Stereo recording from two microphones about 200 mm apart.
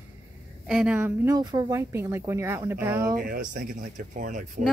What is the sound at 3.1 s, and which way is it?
Speech, 45° right (ahead or behind).